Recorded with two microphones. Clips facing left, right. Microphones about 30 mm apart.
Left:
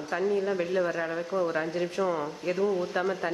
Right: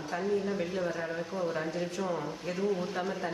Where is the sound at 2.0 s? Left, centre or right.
Left.